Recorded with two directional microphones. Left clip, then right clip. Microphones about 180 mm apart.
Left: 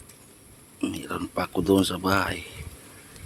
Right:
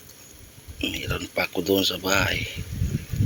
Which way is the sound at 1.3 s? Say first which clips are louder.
Even; 35° left (ahead or behind).